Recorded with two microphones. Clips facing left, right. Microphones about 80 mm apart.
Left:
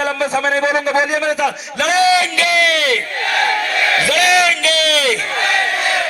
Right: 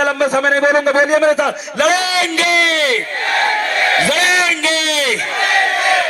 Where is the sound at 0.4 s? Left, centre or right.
Right.